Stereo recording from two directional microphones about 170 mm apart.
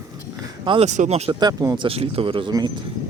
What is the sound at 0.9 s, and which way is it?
Speech, 40° right (ahead or behind).